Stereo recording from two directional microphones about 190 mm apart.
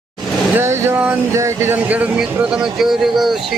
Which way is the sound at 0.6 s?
10° right (ahead or behind).